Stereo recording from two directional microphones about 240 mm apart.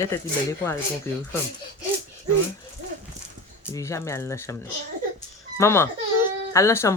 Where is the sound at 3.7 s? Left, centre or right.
Centre.